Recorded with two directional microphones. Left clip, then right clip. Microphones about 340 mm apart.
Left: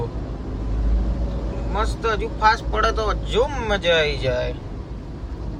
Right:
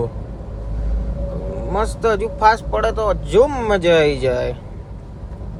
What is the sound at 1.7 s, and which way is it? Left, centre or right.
Speech, centre.